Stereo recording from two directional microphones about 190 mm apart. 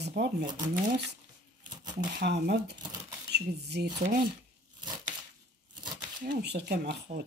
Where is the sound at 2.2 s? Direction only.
60° right (ahead or behind).